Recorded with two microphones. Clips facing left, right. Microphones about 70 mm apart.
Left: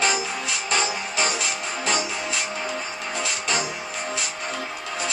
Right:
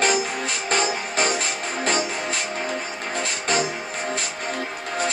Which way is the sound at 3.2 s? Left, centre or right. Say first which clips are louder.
Right 3 dB; right.